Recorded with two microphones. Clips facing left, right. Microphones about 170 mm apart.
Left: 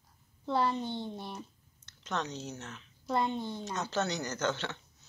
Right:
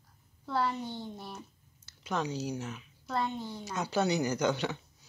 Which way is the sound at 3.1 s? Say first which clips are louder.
Left 2 dB; 20° left (ahead or behind).